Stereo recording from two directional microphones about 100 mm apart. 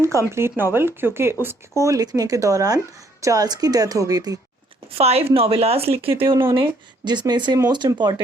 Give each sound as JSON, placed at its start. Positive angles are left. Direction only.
{"t": 0.3, "sound": "speech", "side_deg": -25}
{"t": 4.9, "sound": "a woman's voice", "side_deg": -90}
{"t": 6.2, "sound": "speech", "side_deg": -30}
{"t": 6.5, "sound": "speech", "side_deg": -55}